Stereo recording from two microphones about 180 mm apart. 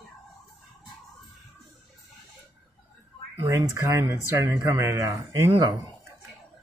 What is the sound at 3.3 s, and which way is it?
Speech, 15° right (ahead or behind).